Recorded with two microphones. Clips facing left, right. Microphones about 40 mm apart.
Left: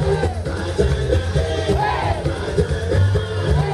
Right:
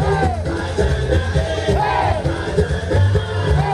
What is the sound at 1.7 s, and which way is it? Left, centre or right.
Crowd, centre.